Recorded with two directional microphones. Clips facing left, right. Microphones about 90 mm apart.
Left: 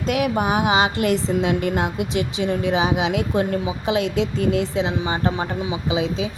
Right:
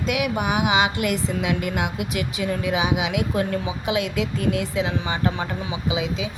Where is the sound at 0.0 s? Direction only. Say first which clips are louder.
Left 3 dB; 35° left (ahead or behind).